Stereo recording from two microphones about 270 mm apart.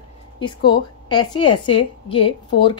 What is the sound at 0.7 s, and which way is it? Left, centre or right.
A woman's voice, centre.